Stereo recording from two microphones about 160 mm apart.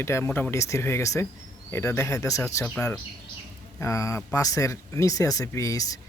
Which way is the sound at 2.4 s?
5° left (ahead or behind).